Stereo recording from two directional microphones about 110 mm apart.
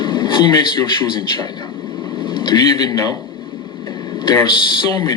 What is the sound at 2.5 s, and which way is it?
Speech, 35° left (ahead or behind).